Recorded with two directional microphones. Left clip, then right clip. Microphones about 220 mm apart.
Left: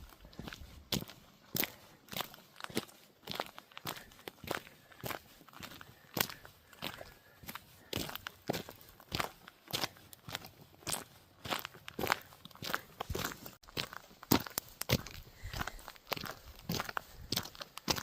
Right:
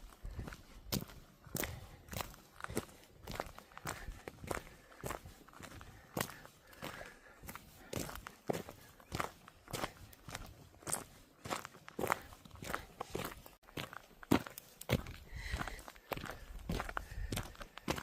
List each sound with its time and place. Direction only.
0.4 s walk: 35° left (ahead or behind)
1.5 s a sound: 35° left (ahead or behind)
3.2 s walk: 35° left (ahead or behind)
6.8 s skateboard: 40° left (ahead or behind)
7.4 s walk: 40° left (ahead or behind)
10.8 s crunch: 40° left (ahead or behind)
14.8 s a sound: 45° left (ahead or behind)